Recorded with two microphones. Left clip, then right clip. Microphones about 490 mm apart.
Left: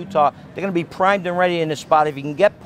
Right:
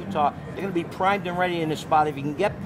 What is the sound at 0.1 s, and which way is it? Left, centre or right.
Speech, left.